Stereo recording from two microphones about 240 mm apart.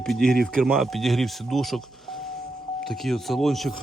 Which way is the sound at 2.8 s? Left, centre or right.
Centre.